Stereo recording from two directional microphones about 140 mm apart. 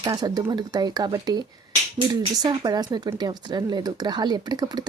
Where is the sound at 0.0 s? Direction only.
25° right (ahead or behind).